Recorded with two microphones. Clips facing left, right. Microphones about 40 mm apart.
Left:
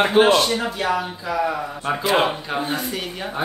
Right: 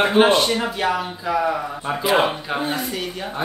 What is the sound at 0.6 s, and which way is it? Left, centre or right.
Speech, centre.